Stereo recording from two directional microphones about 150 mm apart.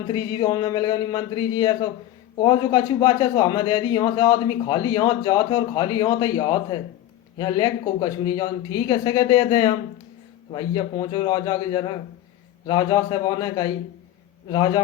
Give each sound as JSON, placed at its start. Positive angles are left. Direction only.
{"t": 0.1, "sound": "a man's voice", "side_deg": 30}